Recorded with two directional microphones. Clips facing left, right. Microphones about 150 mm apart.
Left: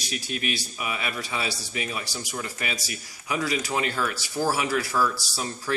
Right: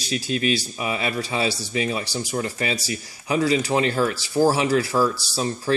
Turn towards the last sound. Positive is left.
turn(degrees=-30)  # may be behind; listen again after turning